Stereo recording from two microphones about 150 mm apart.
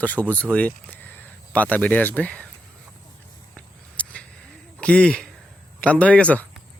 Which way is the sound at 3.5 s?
10° left (ahead or behind).